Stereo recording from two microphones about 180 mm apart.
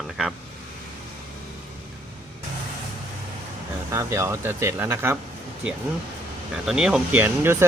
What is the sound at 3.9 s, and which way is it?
Speech, 15° right (ahead or behind).